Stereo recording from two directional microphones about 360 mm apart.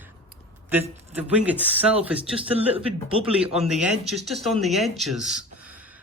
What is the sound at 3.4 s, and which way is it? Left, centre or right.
Speech, centre.